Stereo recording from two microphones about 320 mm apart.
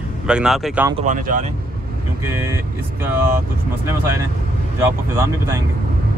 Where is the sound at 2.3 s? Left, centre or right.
Centre.